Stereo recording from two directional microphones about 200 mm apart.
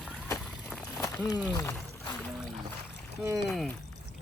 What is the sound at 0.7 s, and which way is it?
Run, centre (ahead or behind).